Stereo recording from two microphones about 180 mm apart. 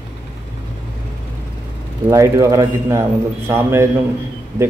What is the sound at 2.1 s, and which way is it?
Speech, 15° right (ahead or behind).